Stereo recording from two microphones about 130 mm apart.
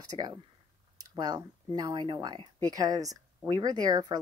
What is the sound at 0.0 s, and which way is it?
Speech, 30° right (ahead or behind).